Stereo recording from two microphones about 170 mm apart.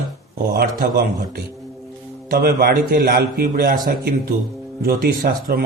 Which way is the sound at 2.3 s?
60° right (ahead or behind).